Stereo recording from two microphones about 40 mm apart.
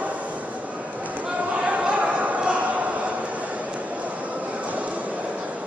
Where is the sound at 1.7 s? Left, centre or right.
Right.